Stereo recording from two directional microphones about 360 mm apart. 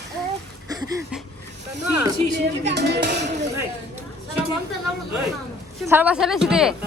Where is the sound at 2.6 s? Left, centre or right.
Right.